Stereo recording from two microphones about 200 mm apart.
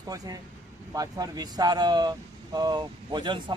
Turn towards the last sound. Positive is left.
turn(degrees=-25)  # may be behind; listen again after turning